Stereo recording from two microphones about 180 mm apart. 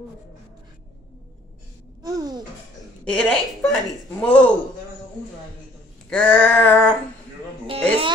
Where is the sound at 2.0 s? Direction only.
20° right (ahead or behind).